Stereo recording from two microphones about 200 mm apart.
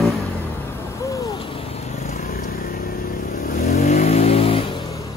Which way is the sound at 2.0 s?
45° left (ahead or behind).